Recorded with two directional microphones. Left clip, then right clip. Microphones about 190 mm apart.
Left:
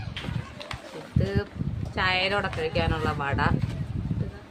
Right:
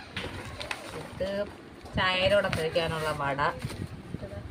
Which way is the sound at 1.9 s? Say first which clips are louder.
Even; 35° left (ahead or behind).